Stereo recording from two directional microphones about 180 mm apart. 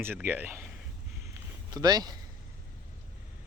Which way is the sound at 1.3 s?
20° right (ahead or behind).